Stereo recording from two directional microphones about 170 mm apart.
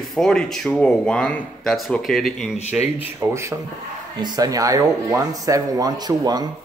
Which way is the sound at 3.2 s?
15° right (ahead or behind).